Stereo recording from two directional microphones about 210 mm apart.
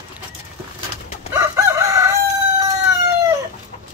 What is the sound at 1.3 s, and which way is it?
Chicken, 15° right (ahead or behind).